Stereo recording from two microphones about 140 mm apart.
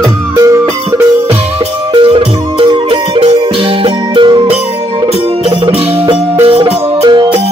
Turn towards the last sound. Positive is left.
turn(degrees=-30)  # may be behind; listen again after turning